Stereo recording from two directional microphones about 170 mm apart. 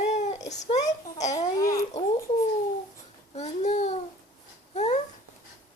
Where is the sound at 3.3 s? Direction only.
40° left (ahead or behind).